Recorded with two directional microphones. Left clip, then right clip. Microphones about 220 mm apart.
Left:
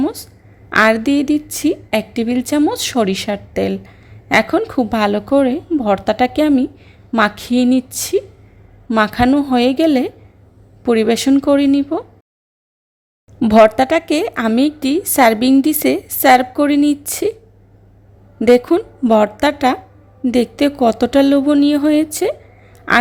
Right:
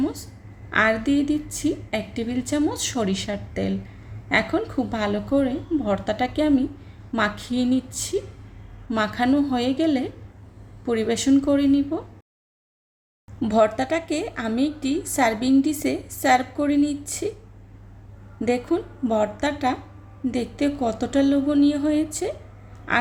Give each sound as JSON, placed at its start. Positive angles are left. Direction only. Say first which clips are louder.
{"t": 0.0, "sound": "a sound", "louder": "left 7 dB", "side_deg": 30}
{"t": 0.7, "sound": "a woman's voice", "louder": "left 8 dB", "side_deg": 35}
{"t": 13.4, "sound": "a woman's voice", "louder": "left 10 dB", "side_deg": 35}
{"t": 18.3, "sound": "a woman's voice", "louder": "left 12 dB", "side_deg": 35}